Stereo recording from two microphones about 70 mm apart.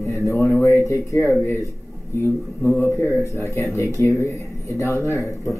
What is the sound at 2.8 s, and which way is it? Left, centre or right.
Speech, left.